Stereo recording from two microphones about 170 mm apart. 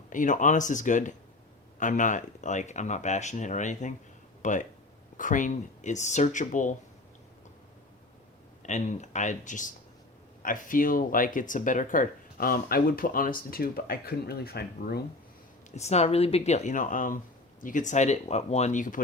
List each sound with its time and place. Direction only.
0.1 s speech: 50° left (ahead or behind)
8.6 s speech: 45° left (ahead or behind); by 15.0 s 70° left (ahead or behind)
15.7 s speech: 40° left (ahead or behind)